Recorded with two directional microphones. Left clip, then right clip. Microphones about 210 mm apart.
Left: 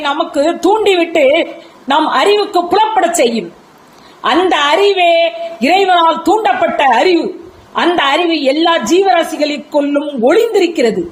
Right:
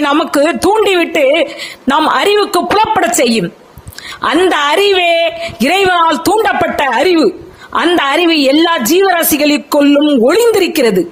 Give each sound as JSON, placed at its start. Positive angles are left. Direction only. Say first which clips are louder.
{"t": 0.0, "sound": "a woman's voice", "louder": "right 3 dB", "side_deg": -50}